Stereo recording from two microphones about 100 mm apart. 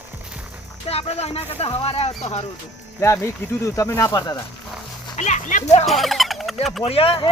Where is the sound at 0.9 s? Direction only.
90° left.